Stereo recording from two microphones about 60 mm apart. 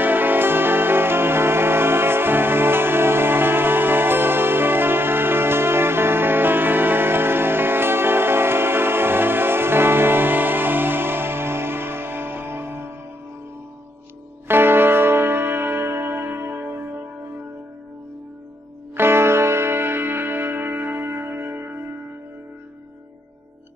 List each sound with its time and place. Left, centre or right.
0.0 s music: right
14.5 s music: right
18.9 s music: right